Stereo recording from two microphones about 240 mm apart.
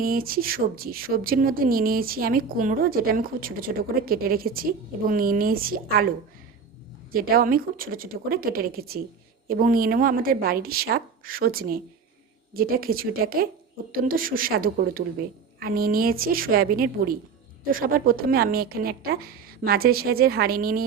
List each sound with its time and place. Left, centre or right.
0.0 s speech: right
7.1 s speech: right